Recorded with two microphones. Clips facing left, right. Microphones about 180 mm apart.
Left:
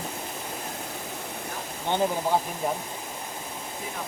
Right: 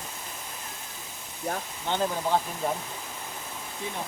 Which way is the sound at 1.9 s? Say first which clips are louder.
Left 2 dB; 15° left (ahead or behind).